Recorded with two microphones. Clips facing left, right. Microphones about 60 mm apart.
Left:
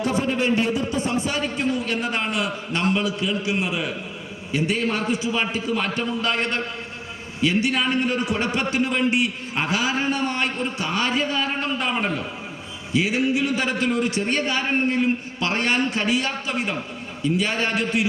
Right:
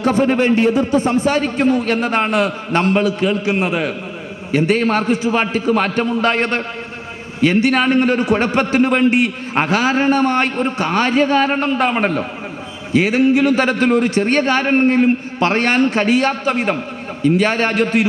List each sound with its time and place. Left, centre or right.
0.0 s a man's voice: right